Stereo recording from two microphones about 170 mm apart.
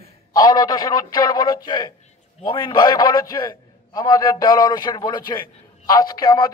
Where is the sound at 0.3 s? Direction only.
25° left (ahead or behind).